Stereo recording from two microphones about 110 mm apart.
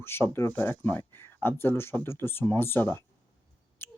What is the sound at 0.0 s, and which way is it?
Speech, 20° left (ahead or behind).